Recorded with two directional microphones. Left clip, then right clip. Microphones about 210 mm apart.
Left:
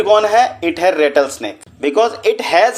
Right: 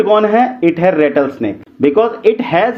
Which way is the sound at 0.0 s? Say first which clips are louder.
Even; 35° left (ahead or behind).